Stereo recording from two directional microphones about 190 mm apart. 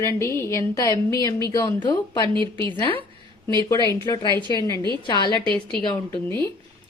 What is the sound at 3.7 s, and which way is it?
A woman's voice, 20° left (ahead or behind).